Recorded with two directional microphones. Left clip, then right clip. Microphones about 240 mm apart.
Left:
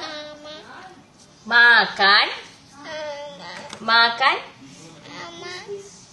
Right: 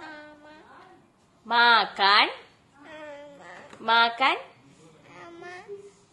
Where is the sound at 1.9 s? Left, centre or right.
Right.